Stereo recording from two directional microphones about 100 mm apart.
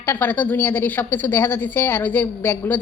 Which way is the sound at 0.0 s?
20° left (ahead or behind).